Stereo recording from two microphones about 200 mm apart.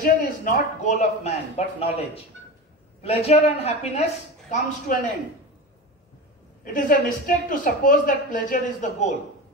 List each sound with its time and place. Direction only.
0.0 s a man's voice: 40° left (ahead or behind)
6.6 s a woman's voice: 40° left (ahead or behind)